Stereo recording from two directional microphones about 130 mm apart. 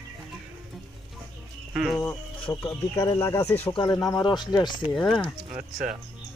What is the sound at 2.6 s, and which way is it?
Speech, 20° left (ahead or behind).